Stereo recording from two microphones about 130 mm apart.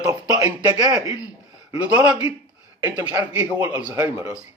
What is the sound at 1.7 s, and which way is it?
Speech, 10° right (ahead or behind).